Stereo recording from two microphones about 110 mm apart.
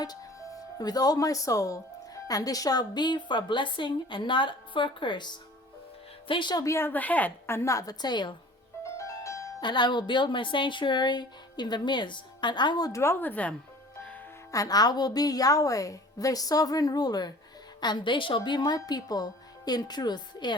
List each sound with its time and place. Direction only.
0.0 s a woman's voice: 35° left (ahead or behind)
6.7 s a woman's voice: 15° left (ahead or behind); by 8.4 s 40° left (ahead or behind)
9.0 s music: 25° left (ahead or behind)
9.6 s a woman's voice: 45° left (ahead or behind); by 13.3 s 25° left (ahead or behind)
13.3 s speech: 10° left (ahead or behind)
14.5 s a woman's voice: 35° left (ahead or behind)